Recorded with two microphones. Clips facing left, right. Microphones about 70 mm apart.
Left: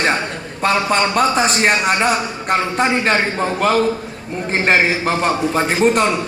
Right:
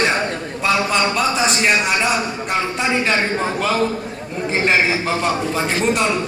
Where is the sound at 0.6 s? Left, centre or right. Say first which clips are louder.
Left 2 dB; left.